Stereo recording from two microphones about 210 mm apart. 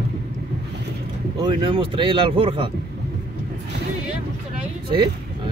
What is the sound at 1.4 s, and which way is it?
Speech, 25° right (ahead or behind).